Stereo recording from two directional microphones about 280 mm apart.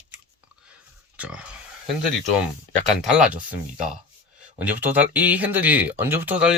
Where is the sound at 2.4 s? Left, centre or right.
Centre.